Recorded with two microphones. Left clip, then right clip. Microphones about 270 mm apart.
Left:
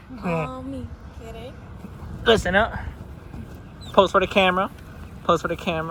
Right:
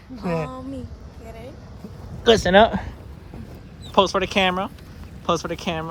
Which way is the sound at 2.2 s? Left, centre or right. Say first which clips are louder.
Right 2 dB; centre.